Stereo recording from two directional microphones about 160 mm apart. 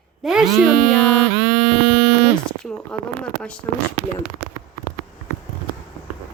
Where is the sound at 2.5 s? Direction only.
5° left (ahead or behind).